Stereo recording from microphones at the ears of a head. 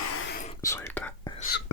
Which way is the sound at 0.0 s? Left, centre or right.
Left.